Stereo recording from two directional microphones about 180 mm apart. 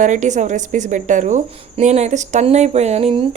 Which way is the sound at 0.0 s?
40° right (ahead or behind).